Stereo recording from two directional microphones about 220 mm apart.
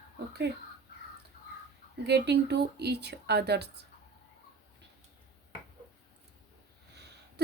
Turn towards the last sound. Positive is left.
turn(degrees=-50)  # may be behind; listen again after turning